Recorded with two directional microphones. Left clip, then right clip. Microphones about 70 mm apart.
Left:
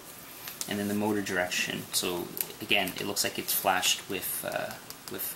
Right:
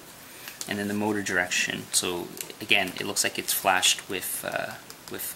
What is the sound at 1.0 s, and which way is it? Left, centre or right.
Speech, right.